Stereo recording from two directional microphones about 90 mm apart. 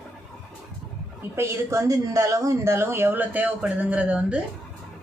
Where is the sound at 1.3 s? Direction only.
30° right (ahead or behind).